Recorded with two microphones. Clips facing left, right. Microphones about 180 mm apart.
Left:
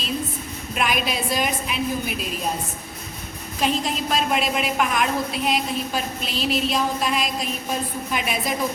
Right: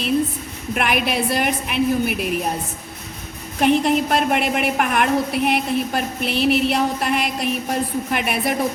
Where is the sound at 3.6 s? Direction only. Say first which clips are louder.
Right 7 dB; 60° right (ahead or behind).